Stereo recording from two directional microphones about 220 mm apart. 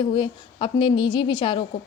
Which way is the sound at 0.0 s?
25° left (ahead or behind).